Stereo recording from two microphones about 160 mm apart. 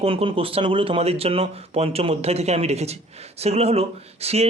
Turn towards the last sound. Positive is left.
turn(degrees=-40)  # may be behind; listen again after turning